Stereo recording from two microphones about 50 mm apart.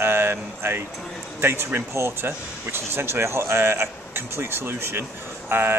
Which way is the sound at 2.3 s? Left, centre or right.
Right.